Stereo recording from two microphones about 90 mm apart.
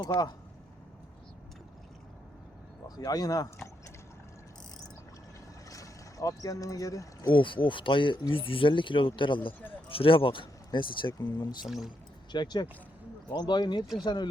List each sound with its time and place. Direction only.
2.8 s speech: 45° left (ahead or behind)
5.6 s vehicle: 40° left (ahead or behind)
7.3 s speech: 65° left (ahead or behind)
8.3 s speech: 80° left
9.9 s speech: 85° left; by 11.1 s 65° left (ahead or behind)
11.3 s speech: 50° left (ahead or behind)
11.7 s speech: 5° right (ahead or behind)
12.3 s speech: 55° left (ahead or behind)